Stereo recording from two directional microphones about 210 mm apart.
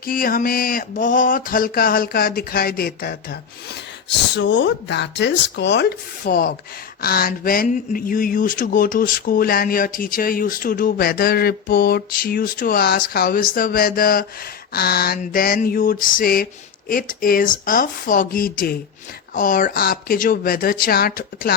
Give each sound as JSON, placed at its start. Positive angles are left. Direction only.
{"t": 0.0, "sound": "speech", "side_deg": 45}
{"t": 4.4, "sound": "speech", "side_deg": 60}